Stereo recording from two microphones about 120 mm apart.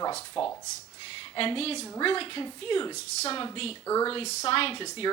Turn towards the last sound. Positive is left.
turn(degrees=50)  # may be behind; listen again after turning